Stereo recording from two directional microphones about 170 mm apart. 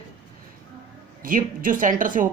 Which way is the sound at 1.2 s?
55° right (ahead or behind).